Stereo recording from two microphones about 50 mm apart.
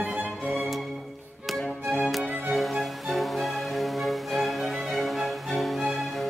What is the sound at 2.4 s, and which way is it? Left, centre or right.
Music, centre.